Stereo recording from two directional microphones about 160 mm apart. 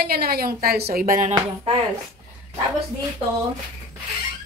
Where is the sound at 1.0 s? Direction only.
55° right (ahead or behind).